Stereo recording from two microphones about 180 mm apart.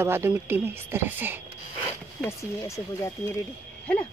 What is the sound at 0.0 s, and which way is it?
Speech, 15° right (ahead or behind).